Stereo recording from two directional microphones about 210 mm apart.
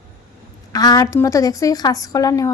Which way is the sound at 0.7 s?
20° left (ahead or behind).